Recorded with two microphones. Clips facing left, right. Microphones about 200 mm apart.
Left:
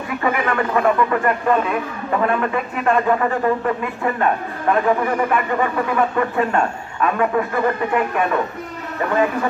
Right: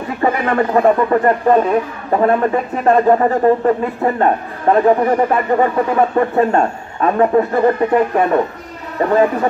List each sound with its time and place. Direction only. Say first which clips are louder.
0.2 s speech: right 5 dB; 35° right (ahead or behind)